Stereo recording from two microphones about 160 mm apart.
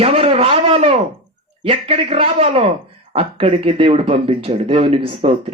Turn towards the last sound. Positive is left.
turn(degrees=-40)  # may be behind; listen again after turning